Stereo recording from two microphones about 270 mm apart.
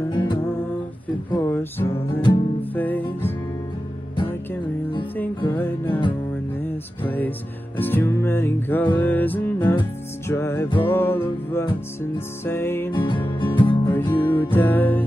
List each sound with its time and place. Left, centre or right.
0.1 s music: centre
5.4 s music: centre
14.5 s music: centre